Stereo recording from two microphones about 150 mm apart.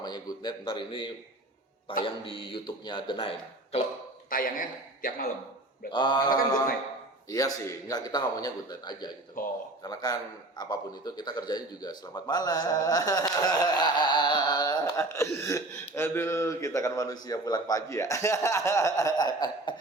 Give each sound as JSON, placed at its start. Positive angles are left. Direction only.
{"t": 0.0, "sound": "speech", "side_deg": 30}
{"t": 4.3, "sound": "a man's voice", "side_deg": 70}
{"t": 5.9, "sound": "a man's voice", "side_deg": 30}
{"t": 9.4, "sound": "speech", "side_deg": 65}
{"t": 9.8, "sound": "a man's voice", "side_deg": 25}